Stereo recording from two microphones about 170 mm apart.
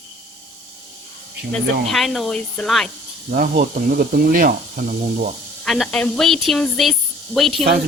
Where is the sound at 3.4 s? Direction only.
50° right (ahead or behind).